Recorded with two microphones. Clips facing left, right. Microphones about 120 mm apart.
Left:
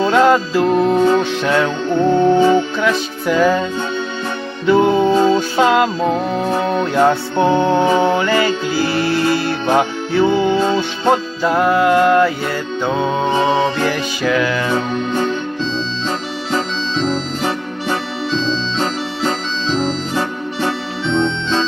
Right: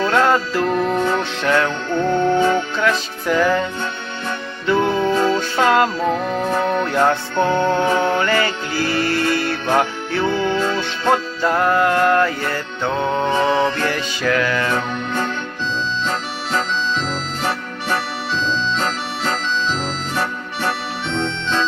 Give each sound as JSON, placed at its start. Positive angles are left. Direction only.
{"t": 0.1, "sound": "music", "side_deg": 15}
{"t": 4.7, "sound": "music", "side_deg": 5}
{"t": 4.9, "sound": "music", "side_deg": 20}
{"t": 11.5, "sound": "music", "side_deg": 5}
{"t": 14.2, "sound": "music", "side_deg": 5}
{"t": 17.0, "sound": "music", "side_deg": 20}
{"t": 19.8, "sound": "music", "side_deg": 20}